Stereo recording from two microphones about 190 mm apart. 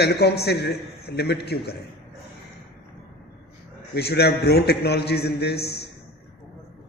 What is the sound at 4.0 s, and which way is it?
A man's voice, 60° left (ahead or behind).